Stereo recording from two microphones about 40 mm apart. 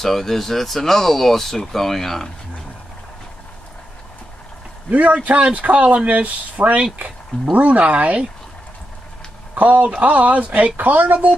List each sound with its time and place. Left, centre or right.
0.0 s speech: centre
4.9 s speech: right
9.6 s a man's voice: right